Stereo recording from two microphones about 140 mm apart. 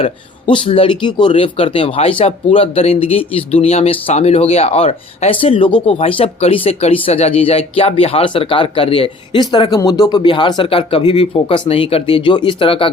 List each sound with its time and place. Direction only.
0.0 s speech: 35° left (ahead or behind)